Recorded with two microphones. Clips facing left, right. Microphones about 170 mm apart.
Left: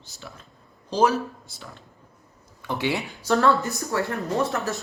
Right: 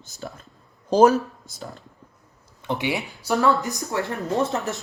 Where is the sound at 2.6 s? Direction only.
20° right (ahead or behind).